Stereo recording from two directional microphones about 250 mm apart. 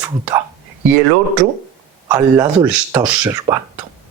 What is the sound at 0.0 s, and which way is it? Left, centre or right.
Speech, centre.